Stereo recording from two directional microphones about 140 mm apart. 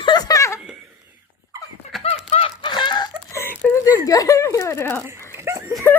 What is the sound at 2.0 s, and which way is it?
Laughter, 45° left (ahead or behind).